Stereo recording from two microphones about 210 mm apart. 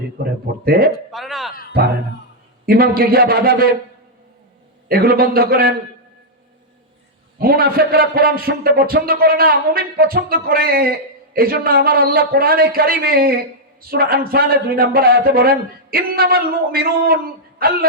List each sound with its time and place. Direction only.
0.2 s a man's voice: 45° right (ahead or behind)
1.1 s a man's voice: centre (ahead or behind)
2.6 s a man's voice: 45° right (ahead or behind)
4.9 s a man's voice: 45° right (ahead or behind)
7.3 s a man's voice: 45° right (ahead or behind)